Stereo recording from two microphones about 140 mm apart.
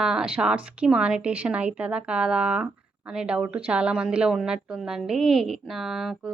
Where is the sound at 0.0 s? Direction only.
5° right (ahead or behind).